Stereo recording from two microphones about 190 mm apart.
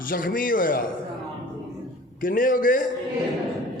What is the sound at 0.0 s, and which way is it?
Speech, 45° left (ahead or behind).